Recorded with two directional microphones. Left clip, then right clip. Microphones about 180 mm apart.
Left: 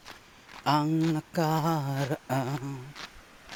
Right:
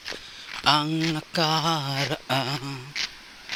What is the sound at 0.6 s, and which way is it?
Speech, 15° left (ahead or behind).